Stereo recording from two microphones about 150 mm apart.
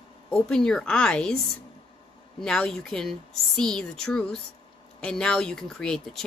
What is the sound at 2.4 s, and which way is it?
Speech, 5° left (ahead or behind).